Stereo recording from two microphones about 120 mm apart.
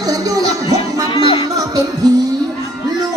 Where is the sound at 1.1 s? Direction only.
45° left (ahead or behind).